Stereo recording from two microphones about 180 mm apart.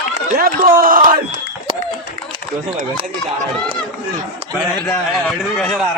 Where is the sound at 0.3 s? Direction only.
55° right (ahead or behind).